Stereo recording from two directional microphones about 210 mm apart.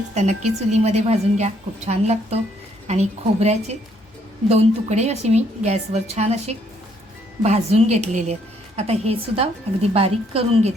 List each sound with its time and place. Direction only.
0.1 s a woman's voice: 35° right (ahead or behind)